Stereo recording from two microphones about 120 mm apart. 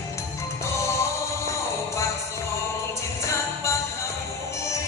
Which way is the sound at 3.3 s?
25° left (ahead or behind).